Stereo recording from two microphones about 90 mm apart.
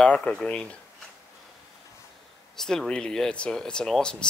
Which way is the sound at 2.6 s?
5° left (ahead or behind).